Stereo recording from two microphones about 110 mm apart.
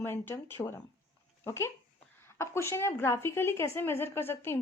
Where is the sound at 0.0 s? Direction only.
20° left (ahead or behind).